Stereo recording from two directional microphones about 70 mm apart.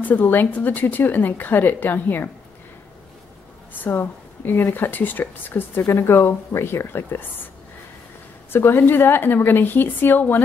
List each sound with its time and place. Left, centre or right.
0.0 s a woman's voice: left
3.8 s a woman's voice: left
5.8 s a woman's voice: left
8.5 s a woman's voice: left